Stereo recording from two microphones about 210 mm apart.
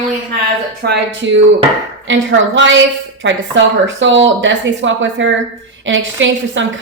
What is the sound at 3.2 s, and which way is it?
A woman's voice, 60° right (ahead or behind).